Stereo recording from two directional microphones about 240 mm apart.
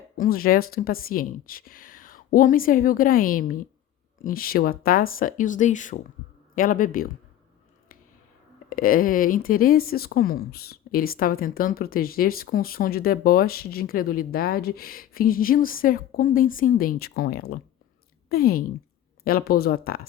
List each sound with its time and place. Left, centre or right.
0.2 s speech: left
8.7 s speech: left